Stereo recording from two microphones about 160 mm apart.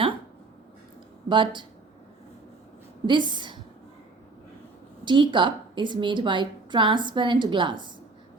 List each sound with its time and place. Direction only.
1.3 s speech: 30° right (ahead or behind)
3.1 s a woman's voice: 30° right (ahead or behind)
5.0 s a woman's voice: 30° right (ahead or behind)